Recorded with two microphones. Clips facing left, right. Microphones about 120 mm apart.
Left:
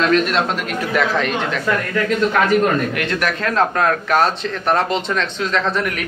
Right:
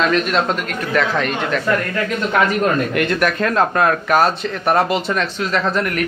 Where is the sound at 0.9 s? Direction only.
Centre (ahead or behind).